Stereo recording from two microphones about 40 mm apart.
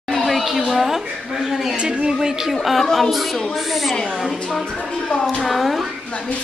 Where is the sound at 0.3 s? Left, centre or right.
Centre.